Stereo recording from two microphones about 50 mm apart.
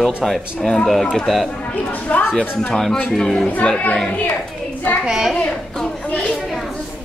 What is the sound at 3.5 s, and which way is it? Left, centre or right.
Speech, left.